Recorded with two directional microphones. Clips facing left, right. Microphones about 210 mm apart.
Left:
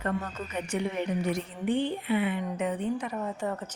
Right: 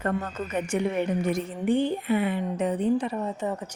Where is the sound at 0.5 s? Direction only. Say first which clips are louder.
Right 5 dB; 50° right (ahead or behind); by 3.1 s 35° right (ahead or behind).